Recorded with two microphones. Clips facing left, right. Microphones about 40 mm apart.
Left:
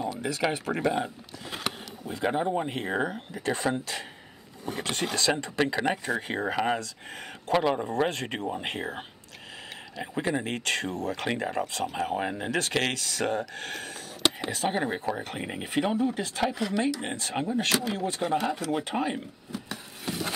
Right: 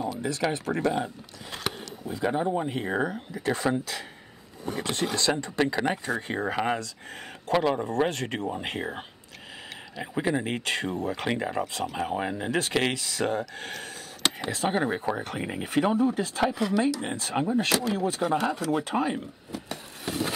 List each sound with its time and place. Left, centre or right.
0.0 s a sound: centre
0.4 s speech: centre
2.2 s speech: centre
2.7 s speech: centre
15.3 s speech: centre